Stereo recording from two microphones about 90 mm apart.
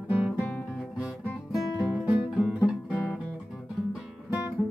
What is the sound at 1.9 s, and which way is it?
Music, 15° right (ahead or behind).